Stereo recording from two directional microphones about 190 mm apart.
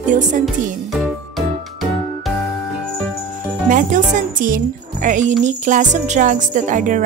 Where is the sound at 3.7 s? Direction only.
45° right (ahead or behind).